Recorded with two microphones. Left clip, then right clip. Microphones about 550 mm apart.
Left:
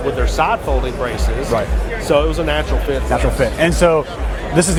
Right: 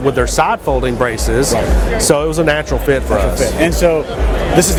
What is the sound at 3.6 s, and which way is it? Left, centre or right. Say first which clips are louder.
Speech: even; left.